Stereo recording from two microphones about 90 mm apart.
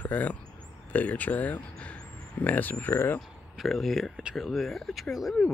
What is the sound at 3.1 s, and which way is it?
Speech, centre (ahead or behind).